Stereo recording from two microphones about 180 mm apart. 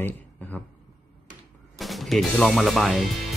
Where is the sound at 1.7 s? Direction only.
Centre (ahead or behind).